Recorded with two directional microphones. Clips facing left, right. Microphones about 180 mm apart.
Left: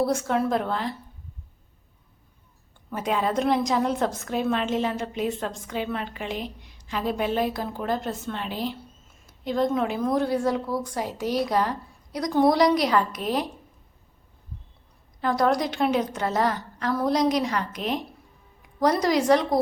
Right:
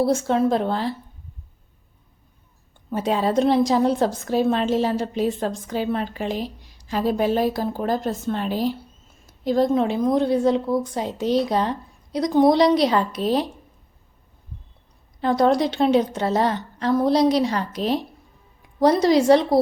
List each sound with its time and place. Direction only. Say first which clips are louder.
0.0 s a woman's voice: right 4 dB; 25° right (ahead or behind)
2.9 s a woman's voice: right 4 dB; 30° right (ahead or behind)
15.2 s a woman's voice: right 4 dB; 25° right (ahead or behind)